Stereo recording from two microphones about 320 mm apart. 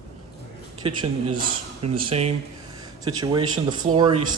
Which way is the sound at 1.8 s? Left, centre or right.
Centre.